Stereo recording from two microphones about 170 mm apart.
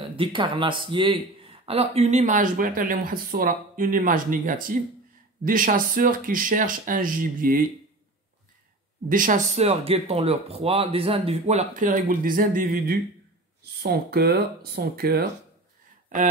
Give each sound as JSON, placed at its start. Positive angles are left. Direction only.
{"t": 0.2, "sound": "a man's voice", "side_deg": -30}
{"t": 9.1, "sound": "speech", "side_deg": -50}
{"t": 16.1, "sound": "speech", "side_deg": -45}